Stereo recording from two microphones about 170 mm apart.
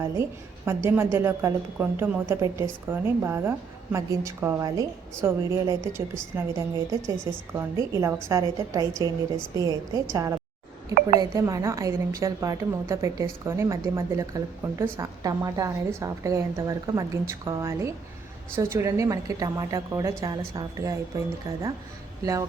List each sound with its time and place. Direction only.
0.0 s a woman's voice: 15° right (ahead or behind)
22.2 s a woman's voice: 20° right (ahead or behind)